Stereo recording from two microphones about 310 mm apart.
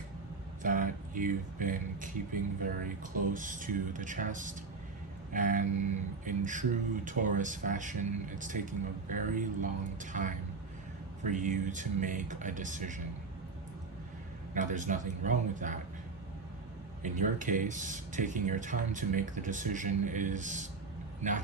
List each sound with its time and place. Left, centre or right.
0.6 s speech: right
14.5 s speech: right
17.0 s a man's voice: right